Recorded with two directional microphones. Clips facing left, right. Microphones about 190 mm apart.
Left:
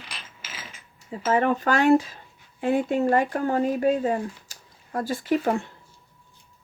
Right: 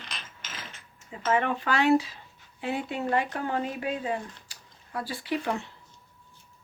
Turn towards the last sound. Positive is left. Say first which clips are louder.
# left 6 dB
turn(degrees=45)  # may be behind; listen again after turning